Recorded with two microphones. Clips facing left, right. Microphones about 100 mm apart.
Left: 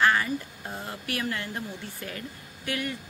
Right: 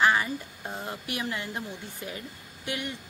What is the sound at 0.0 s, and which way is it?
A woman's voice, 15° right (ahead or behind).